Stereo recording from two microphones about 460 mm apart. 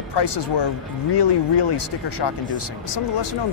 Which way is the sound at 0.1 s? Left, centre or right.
Left.